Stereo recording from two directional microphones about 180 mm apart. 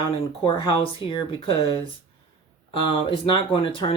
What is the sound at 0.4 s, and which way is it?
Speech, 30° left (ahead or behind).